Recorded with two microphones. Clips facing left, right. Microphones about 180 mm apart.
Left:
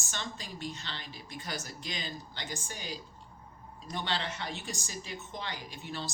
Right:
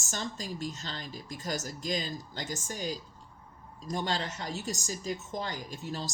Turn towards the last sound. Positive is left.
turn(degrees=-40)  # may be behind; listen again after turning